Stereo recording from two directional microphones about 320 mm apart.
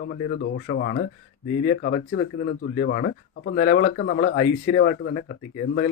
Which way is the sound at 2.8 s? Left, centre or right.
Left.